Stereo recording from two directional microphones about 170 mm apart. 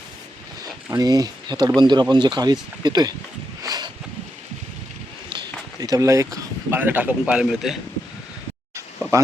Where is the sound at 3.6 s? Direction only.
25° right (ahead or behind).